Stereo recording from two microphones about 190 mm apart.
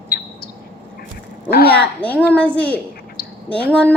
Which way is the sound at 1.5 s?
55° left (ahead or behind).